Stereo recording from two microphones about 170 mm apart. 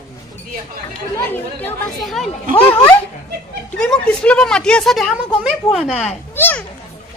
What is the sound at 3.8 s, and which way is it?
Speech, 5° left (ahead or behind).